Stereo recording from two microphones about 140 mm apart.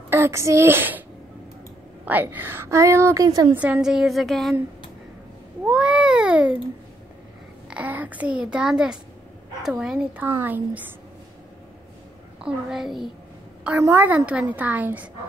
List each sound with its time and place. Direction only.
0.1 s a woman's voice: 20° right (ahead or behind)
2.0 s a woman's voice: 10° right (ahead or behind)
3.5 s speech: 10° right (ahead or behind)
5.7 s a sound: 5° right (ahead or behind)
7.7 s a child's voice: 10° right (ahead or behind)
12.4 s speech: 5° right (ahead or behind)
13.8 s a woman's voice: 15° right (ahead or behind)